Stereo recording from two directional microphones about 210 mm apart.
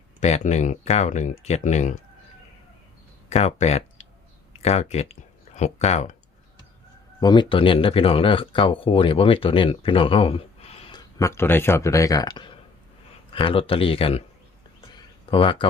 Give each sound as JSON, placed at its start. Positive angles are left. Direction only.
{"t": 0.2, "sound": "speech", "side_deg": 30}
{"t": 3.2, "sound": "speech", "side_deg": 30}
{"t": 7.2, "sound": "speech", "side_deg": 20}
{"t": 11.2, "sound": "speech", "side_deg": 10}
{"t": 14.9, "sound": "a sound", "side_deg": 25}